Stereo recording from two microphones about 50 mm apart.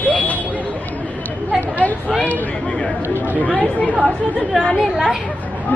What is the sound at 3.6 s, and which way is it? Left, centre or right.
Speech, left.